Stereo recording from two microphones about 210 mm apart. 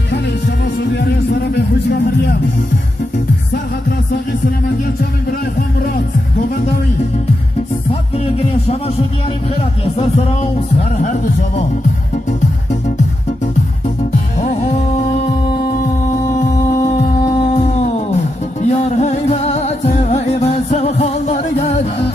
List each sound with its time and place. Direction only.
9.9 s music: 30° left (ahead or behind)
14.4 s music: 35° left (ahead or behind)
16.3 s music: 35° left (ahead or behind)